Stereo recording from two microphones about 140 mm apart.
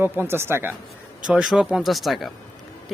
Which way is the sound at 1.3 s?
5° right (ahead or behind).